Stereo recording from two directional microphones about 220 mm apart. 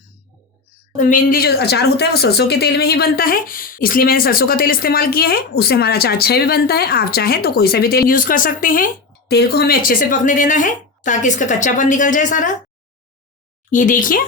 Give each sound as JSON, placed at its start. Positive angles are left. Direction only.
{"t": 0.9, "sound": "speech", "side_deg": 35}
{"t": 13.7, "sound": "speech", "side_deg": 35}